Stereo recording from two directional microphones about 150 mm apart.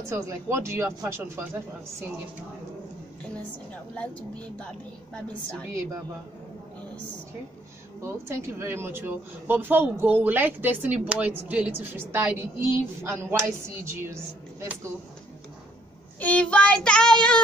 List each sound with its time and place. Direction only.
0.0 s speech: 20° right (ahead or behind)
3.9 s child singing: 10° left (ahead or behind)
8.0 s speech: 15° right (ahead or behind)
16.2 s child singing: 10° left (ahead or behind)